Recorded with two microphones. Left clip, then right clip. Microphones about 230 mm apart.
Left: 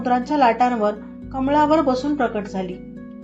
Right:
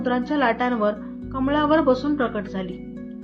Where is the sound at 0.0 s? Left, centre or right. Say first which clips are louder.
Left 5 dB; centre.